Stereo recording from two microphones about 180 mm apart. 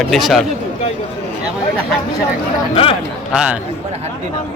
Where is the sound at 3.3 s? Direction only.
5° right (ahead or behind).